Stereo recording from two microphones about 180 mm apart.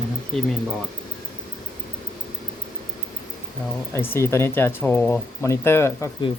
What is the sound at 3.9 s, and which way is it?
Speech, 10° left (ahead or behind).